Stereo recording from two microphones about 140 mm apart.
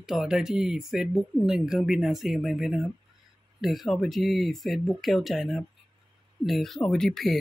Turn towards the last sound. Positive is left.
turn(degrees=0)  # may be behind; listen again after turning